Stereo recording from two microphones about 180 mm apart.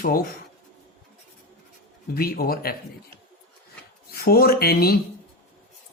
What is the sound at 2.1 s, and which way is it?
Speech, 55° left (ahead or behind).